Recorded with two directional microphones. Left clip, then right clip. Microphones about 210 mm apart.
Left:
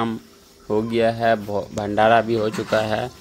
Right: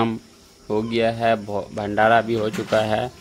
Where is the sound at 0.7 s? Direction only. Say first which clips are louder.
Left 1 dB; 5° left (ahead or behind).